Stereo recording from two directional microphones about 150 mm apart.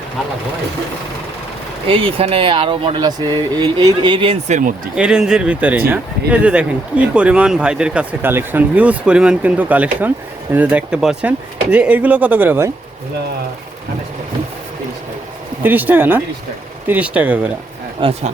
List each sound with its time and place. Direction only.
1.9 s speech: 40° right (ahead or behind)
4.4 s speech: 50° right (ahead or behind)
4.9 s speech: 5° right (ahead or behind)
15.6 s speech: 10° right (ahead or behind)
18.0 s speech: 35° right (ahead or behind)